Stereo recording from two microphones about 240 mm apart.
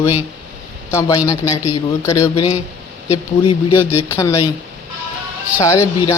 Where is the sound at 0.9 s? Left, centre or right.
Centre.